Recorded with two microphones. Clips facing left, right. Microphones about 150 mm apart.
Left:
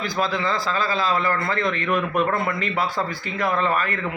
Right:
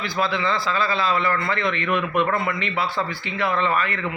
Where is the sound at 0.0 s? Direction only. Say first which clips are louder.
Even; 40° left (ahead or behind).